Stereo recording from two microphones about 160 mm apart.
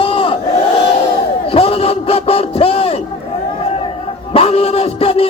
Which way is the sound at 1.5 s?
35° left (ahead or behind).